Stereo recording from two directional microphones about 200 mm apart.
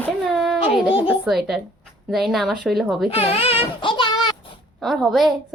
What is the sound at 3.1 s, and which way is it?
A child's voice, 30° left (ahead or behind).